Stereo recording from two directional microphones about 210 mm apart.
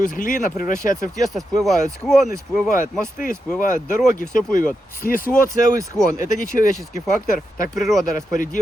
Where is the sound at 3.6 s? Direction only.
40° left (ahead or behind).